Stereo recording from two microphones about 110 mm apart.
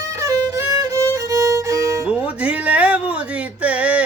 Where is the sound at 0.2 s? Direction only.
25° right (ahead or behind).